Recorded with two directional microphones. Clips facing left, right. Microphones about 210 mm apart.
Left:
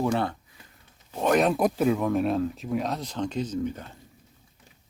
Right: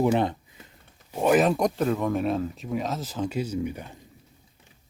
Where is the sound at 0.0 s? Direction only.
20° right (ahead or behind).